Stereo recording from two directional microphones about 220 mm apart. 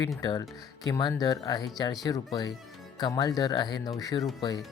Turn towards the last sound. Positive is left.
turn(degrees=20)  # may be behind; listen again after turning